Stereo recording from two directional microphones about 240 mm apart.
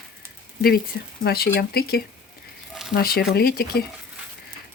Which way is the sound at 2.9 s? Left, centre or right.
Left.